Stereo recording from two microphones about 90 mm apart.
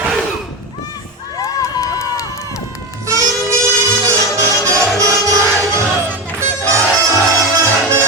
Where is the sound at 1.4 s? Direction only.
35° left (ahead or behind).